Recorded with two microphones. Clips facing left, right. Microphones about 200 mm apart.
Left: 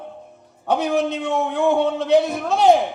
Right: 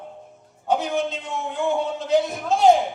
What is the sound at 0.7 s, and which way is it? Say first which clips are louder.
A man's voice: left 3 dB; 65° left (ahead or behind).